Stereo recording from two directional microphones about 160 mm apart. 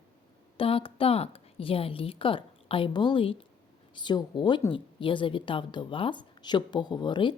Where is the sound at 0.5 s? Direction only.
35° left (ahead or behind).